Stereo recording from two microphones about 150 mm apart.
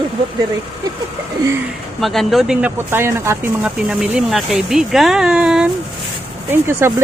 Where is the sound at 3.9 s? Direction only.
5° right (ahead or behind).